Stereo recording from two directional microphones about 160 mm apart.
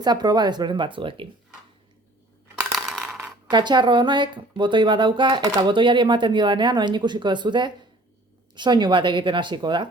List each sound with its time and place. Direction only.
0.0 s speech: 25° right (ahead or behind)
2.7 s a sound: centre (ahead or behind)
3.5 s speech: 30° right (ahead or behind)